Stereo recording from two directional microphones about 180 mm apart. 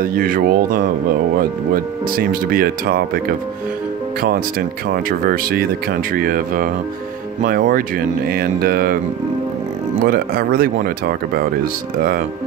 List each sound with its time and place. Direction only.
0.0 s speech: 50° right (ahead or behind)
10.0 s speech: 55° right (ahead or behind)